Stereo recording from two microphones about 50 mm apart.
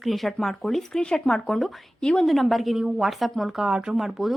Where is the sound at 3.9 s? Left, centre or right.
Centre.